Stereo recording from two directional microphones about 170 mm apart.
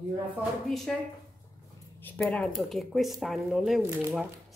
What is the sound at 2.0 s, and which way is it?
Speech, 10° left (ahead or behind).